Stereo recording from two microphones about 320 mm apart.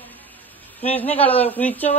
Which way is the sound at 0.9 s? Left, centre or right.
Centre.